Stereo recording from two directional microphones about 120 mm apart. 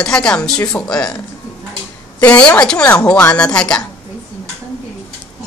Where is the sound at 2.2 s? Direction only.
10° left (ahead or behind).